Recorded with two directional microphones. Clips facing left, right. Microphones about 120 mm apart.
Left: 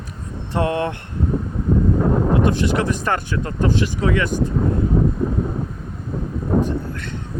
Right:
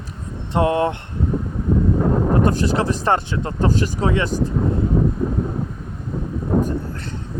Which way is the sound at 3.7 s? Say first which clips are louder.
Left 1 dB; 40° right (ahead or behind).